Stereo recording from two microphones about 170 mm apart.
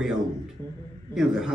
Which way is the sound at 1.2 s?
5° right (ahead or behind).